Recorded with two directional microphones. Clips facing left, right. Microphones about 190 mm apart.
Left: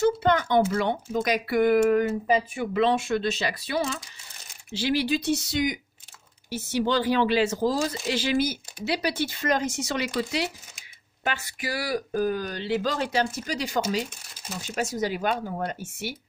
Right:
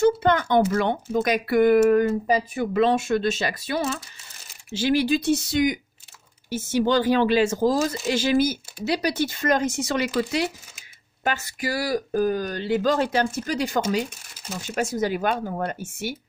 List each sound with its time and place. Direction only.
0.0 s speech: 50° right (ahead or behind)
11.2 s speech: 40° right (ahead or behind)